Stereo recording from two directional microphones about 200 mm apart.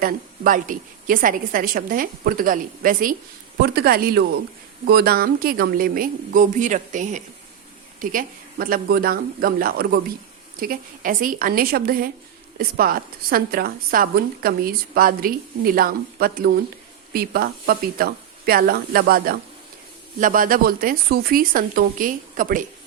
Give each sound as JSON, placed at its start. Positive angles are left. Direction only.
{"t": 0.0, "sound": "a woman's voice", "side_deg": -40}